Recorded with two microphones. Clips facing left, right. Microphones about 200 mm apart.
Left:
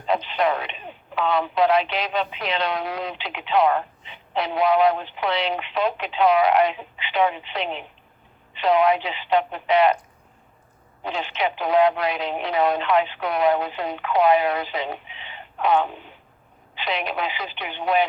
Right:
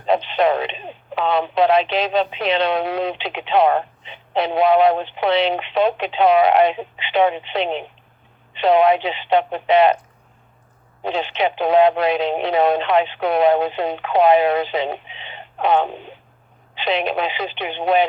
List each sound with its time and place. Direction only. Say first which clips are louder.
0.0 s speech: right 5 dB; 25° right (ahead or behind)
11.0 s speech: right 5 dB; 25° right (ahead or behind)